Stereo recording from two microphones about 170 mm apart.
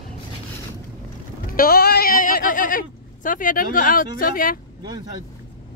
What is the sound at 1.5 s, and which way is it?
Speech, 65° left (ahead or behind).